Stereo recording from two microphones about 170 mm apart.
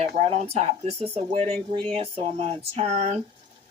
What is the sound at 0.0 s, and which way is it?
Speech, 40° right (ahead or behind).